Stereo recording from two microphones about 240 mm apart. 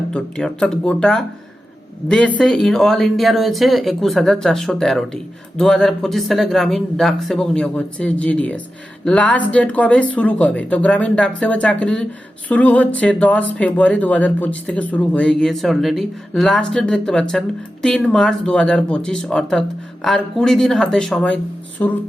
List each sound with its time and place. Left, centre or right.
0.1 s speech: centre